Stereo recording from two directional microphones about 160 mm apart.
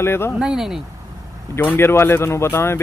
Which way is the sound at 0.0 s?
15° left (ahead or behind).